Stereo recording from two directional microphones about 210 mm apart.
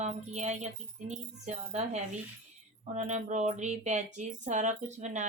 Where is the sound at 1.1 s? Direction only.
35° right (ahead or behind).